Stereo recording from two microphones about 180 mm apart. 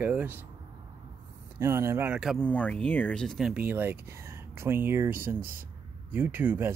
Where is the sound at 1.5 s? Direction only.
15° right (ahead or behind).